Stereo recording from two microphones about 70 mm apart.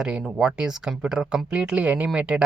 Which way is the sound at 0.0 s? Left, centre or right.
Centre.